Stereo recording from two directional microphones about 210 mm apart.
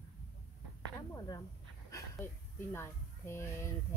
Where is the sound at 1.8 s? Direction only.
10° left (ahead or behind).